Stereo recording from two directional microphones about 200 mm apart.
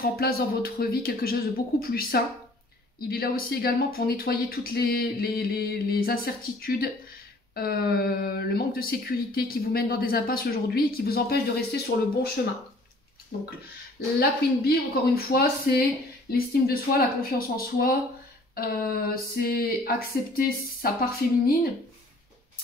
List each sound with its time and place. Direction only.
0.0 s speech: 50° left (ahead or behind)
15.1 s speech: 50° left (ahead or behind)